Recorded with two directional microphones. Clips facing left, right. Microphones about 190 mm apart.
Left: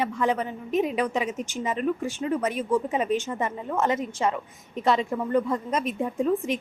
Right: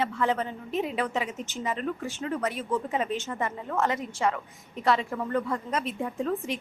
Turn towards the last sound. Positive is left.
turn(degrees=20)  # may be behind; listen again after turning